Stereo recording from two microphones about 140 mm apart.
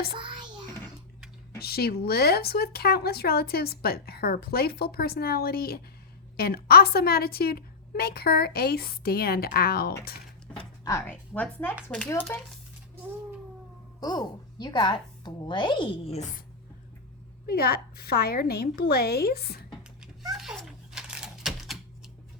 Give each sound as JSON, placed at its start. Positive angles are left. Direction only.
{"t": 0.1, "sound": "a sound", "side_deg": -35}
{"t": 1.5, "sound": "speech", "side_deg": 90}
{"t": 10.8, "sound": "speech", "side_deg": 20}
{"t": 12.3, "sound": "speech", "side_deg": 20}
{"t": 14.0, "sound": "speech", "side_deg": 30}
{"t": 17.4, "sound": "speech", "side_deg": 90}
{"t": 20.0, "sound": "a sound", "side_deg": -5}